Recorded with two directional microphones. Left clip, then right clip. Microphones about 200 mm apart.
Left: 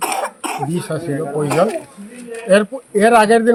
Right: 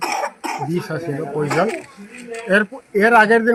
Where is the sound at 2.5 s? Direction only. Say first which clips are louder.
Left 4 dB; 15° left (ahead or behind).